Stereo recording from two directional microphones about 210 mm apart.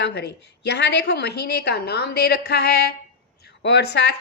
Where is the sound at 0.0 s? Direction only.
50° left (ahead or behind).